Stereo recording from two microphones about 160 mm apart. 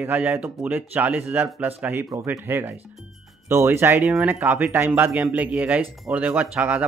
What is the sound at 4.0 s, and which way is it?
Speech, 5° right (ahead or behind).